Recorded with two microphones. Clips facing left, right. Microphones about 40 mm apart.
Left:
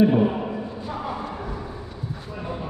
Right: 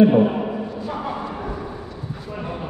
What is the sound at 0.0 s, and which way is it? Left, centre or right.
Speech, right.